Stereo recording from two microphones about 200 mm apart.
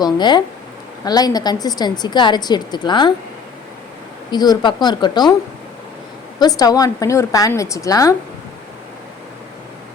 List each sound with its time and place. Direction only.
0.0 s a woman's voice: 20° left (ahead or behind)
4.3 s a woman's voice: 20° left (ahead or behind)
6.4 s a woman's voice: 20° left (ahead or behind)